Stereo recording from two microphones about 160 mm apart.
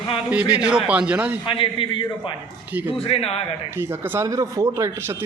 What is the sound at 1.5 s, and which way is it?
A man's voice, 30° left (ahead or behind).